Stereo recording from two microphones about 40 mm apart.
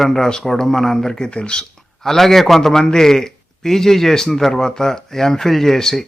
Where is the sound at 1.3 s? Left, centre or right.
Left.